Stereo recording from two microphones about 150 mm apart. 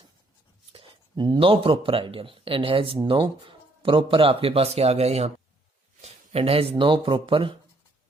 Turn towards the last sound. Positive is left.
turn(degrees=-35)  # may be behind; listen again after turning